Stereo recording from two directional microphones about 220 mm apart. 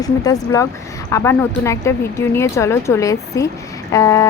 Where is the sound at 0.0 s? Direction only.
15° left (ahead or behind).